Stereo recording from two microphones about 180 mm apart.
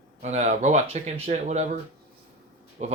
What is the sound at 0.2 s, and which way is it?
Speech, 40° right (ahead or behind).